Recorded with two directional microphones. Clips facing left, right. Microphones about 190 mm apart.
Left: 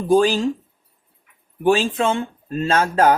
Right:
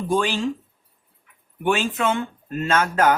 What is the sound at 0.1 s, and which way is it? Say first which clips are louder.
Speech: left 7 dB; 40° left (ahead or behind).